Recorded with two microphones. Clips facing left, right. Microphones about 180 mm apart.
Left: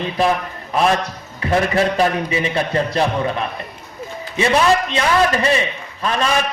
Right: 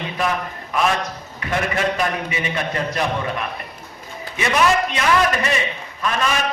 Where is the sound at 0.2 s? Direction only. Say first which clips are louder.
Left 5 dB; 35° left (ahead or behind).